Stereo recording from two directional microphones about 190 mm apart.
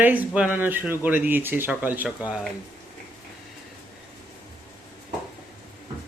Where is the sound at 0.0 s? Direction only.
10° right (ahead or behind).